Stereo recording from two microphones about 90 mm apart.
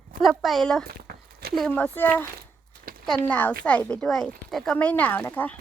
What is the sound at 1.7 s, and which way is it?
Speech, 20° left (ahead or behind).